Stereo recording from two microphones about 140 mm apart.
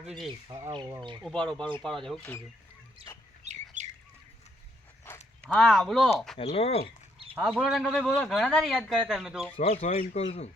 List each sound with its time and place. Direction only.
0.0 s speech: centre (ahead or behind)
0.7 s speech: 30° right (ahead or behind)
1.2 s speech: 5° left (ahead or behind)
3.0 s speech: 40° right (ahead or behind)
3.4 s bird: 55° right (ahead or behind)
5.1 s dog: 15° left (ahead or behind)
5.4 s speech: 5° left (ahead or behind)
6.4 s speech: 45° left (ahead or behind)
7.3 s speech: 5° right (ahead or behind)
9.6 s speech: 55° left (ahead or behind)